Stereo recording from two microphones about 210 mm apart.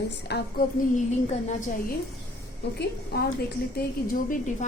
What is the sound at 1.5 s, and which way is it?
A woman's voice, 40° left (ahead or behind).